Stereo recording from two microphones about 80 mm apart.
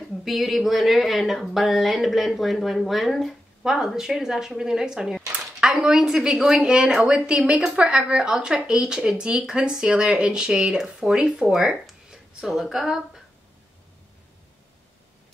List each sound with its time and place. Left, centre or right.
0.2 s a woman's voice: centre